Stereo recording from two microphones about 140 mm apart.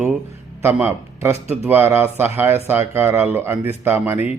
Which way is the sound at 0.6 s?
15° right (ahead or behind).